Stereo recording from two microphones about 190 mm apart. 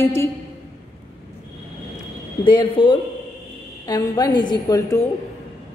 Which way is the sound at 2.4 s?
25° left (ahead or behind).